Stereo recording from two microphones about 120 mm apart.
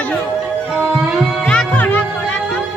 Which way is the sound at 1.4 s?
10° left (ahead or behind).